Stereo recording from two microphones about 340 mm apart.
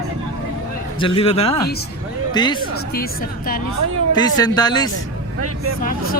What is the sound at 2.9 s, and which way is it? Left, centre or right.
Speech, left.